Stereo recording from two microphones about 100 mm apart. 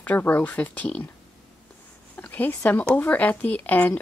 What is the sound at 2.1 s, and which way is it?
Speech, 15° left (ahead or behind).